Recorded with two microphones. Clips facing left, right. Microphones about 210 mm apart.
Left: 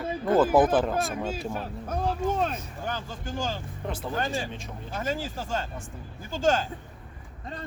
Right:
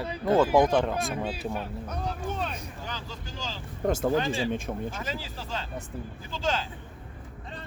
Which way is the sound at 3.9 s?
45° right (ahead or behind).